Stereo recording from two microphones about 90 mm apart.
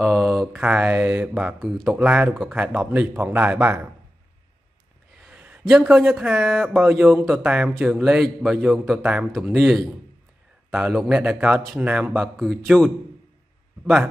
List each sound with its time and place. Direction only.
0.0 s a sound: centre (ahead or behind)
0.5 s a man's voice: 15° right (ahead or behind)
2.0 s a man's voice: 15° right (ahead or behind)
5.2 s a sound: 15° right (ahead or behind)
5.7 s a man's voice: 5° right (ahead or behind)
12.1 s a man's voice: 5° left (ahead or behind)